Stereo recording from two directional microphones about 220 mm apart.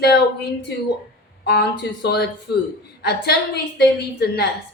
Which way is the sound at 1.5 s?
50° left (ahead or behind).